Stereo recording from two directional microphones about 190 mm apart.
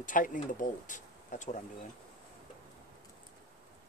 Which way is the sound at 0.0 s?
45° left (ahead or behind).